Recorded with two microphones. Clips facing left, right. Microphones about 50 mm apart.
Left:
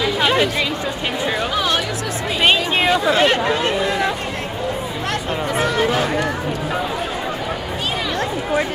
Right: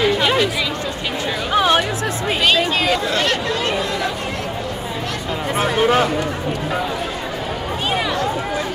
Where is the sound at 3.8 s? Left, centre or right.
Centre.